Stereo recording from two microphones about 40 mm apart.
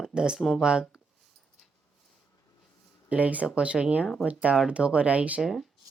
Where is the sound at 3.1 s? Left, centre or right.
Right.